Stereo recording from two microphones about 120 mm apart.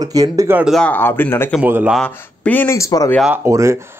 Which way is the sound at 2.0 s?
15° left (ahead or behind).